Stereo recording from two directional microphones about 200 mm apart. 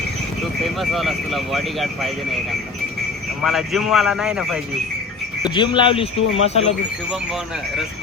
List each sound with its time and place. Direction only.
0.8 s speech: centre (ahead or behind)
5.4 s speech: 20° left (ahead or behind)
6.1 s speech: 80° left
6.4 s speech: 30° left (ahead or behind)